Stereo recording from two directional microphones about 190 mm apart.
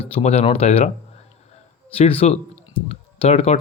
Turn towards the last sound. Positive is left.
turn(degrees=30)  # may be behind; listen again after turning